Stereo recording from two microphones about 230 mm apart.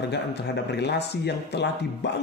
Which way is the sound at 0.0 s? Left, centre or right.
Left.